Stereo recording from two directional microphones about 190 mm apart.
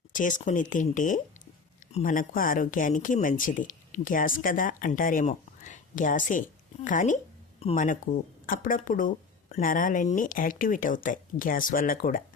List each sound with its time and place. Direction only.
0.1 s speech: 45° left (ahead or behind)
7.6 s speech: 30° left (ahead or behind)
7.9 s speech: 45° left (ahead or behind)